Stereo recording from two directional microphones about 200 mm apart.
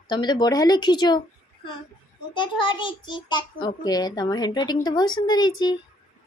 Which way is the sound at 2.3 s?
25° left (ahead or behind).